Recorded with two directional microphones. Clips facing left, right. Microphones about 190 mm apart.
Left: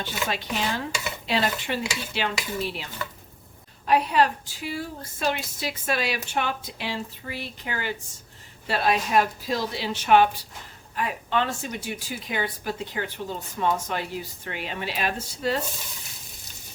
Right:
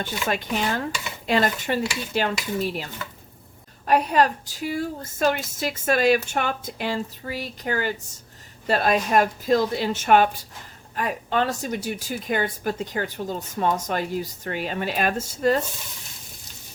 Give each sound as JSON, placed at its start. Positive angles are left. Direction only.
{"t": 0.0, "sound": "a woman's voice", "side_deg": -50}